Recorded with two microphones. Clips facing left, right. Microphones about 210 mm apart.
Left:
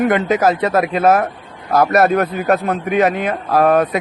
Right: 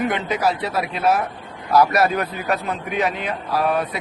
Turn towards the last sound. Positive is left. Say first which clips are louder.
# left 8 dB
turn(degrees=45)  # may be behind; listen again after turning